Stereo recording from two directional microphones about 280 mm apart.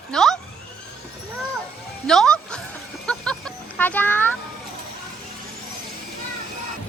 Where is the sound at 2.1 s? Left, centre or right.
Centre.